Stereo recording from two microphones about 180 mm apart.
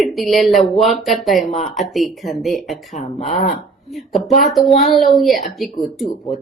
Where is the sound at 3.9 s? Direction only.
Centre (ahead or behind).